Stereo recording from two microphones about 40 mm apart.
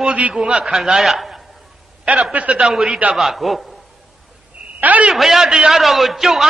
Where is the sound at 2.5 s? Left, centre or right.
Centre.